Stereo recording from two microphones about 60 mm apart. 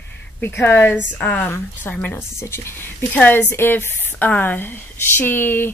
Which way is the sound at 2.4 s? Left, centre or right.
Left.